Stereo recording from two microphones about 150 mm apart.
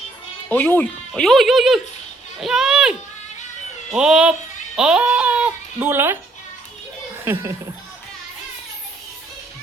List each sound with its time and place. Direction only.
0.4 s speech: 10° left (ahead or behind); by 2.9 s 5° right (ahead or behind)
3.9 s speech: 5° right (ahead or behind)
7.3 s speech: 20° right (ahead or behind)